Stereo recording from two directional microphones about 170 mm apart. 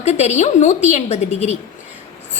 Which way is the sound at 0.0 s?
40° left (ahead or behind).